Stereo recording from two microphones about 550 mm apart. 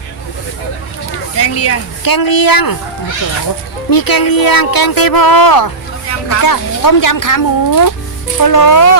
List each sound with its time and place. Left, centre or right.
1.4 s speech: left
2.0 s speech: left
3.8 s speech: left